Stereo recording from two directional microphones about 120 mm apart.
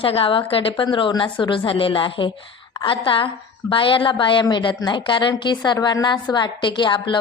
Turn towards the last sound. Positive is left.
turn(degrees=40)  # may be behind; listen again after turning